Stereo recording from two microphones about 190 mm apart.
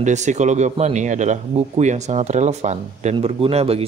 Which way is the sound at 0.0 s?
40° right (ahead or behind).